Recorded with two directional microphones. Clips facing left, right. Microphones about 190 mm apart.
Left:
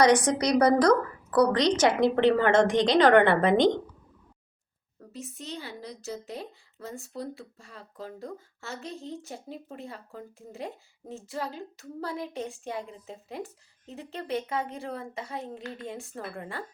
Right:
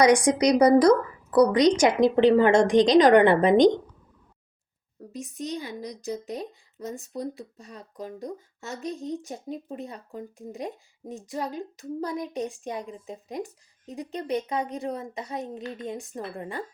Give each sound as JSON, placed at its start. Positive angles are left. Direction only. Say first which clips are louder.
{"t": 0.0, "sound": "speech", "louder": "right 3 dB", "side_deg": -10}
{"t": 4.9, "sound": "speech", "louder": "right 6 dB", "side_deg": -15}